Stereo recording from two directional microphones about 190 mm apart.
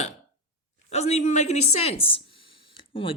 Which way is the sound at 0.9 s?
35° left (ahead or behind).